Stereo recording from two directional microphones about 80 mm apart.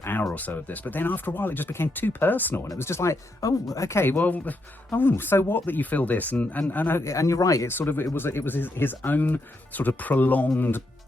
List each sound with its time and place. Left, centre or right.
0.0 s a sound: left
0.3 s speech: left
2.7 s speech: left
4.2 s speech: left
7.1 s speech: left
7.7 s speech: left